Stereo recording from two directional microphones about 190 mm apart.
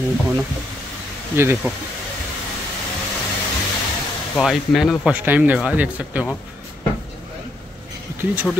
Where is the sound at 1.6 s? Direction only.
10° right (ahead or behind).